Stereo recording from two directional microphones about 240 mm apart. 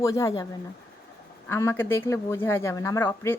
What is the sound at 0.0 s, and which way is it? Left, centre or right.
Speech, centre.